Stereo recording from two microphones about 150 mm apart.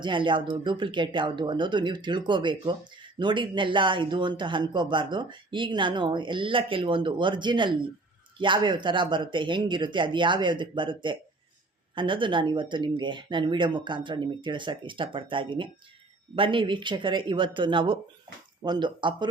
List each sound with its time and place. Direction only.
0.0 s speech: 30° right (ahead or behind)